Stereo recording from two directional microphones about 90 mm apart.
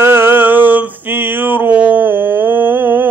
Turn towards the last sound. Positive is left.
turn(degrees=-20)  # may be behind; listen again after turning